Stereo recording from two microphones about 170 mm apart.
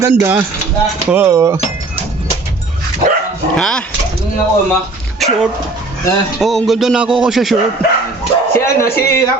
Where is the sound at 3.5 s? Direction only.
5° left (ahead or behind).